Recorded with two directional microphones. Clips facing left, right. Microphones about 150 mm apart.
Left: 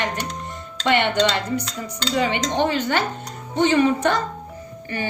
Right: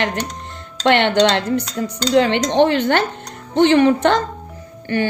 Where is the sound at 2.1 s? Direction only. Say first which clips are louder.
Right 7 dB; 70° right (ahead or behind).